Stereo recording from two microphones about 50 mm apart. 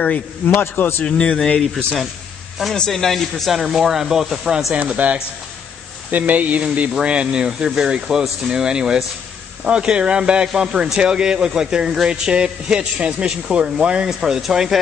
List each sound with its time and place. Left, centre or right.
0.6 s a man's voice: left
1.0 s speech: left
2.7 s speech: centre
3.5 s speech: centre
4.9 s speech: right; by 14.8 s centre